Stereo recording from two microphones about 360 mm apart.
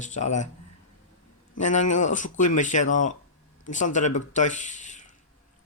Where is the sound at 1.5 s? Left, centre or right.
Centre.